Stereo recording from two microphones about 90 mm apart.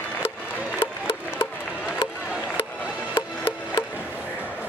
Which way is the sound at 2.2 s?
10° right (ahead or behind).